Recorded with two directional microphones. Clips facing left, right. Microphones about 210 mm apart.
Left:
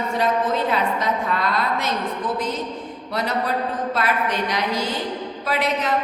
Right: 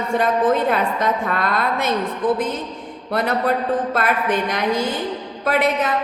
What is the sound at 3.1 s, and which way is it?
A woman's voice, 55° right (ahead or behind).